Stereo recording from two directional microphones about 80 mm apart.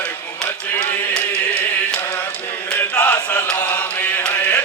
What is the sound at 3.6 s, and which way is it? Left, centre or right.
Mantra, left.